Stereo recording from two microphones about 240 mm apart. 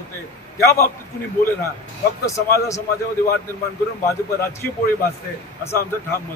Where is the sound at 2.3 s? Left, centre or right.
Left.